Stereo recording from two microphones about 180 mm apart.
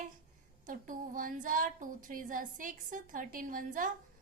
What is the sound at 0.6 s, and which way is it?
Child singing, 45° right (ahead or behind).